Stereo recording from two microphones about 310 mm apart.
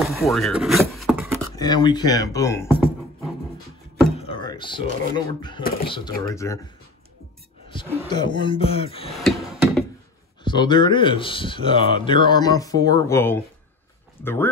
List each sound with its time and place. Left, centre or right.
0.0 s a sound: centre
1.6 s speech: centre
4.3 s speech: centre
8.1 s speech: centre
9.1 s a sound: centre
10.4 s speech: centre